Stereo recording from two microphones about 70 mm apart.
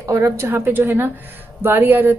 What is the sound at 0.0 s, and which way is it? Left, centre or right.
Speech, right.